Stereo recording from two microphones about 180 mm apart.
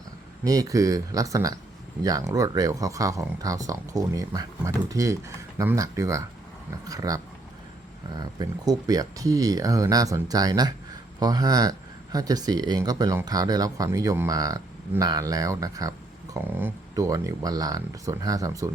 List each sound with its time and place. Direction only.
0.4 s speech: 20° right (ahead or behind)